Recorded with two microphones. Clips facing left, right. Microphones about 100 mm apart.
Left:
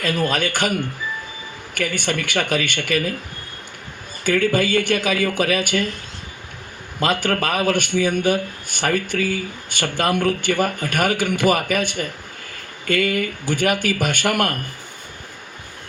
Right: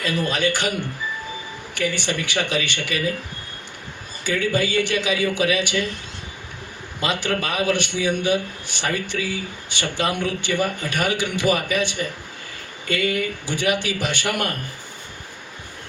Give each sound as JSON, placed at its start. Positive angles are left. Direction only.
{"t": 0.0, "sound": "speech", "side_deg": 50}
{"t": 4.2, "sound": "speech", "side_deg": 50}
{"t": 7.0, "sound": "speech", "side_deg": 50}